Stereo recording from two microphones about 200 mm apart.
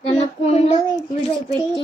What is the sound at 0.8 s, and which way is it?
Speech, 15° left (ahead or behind).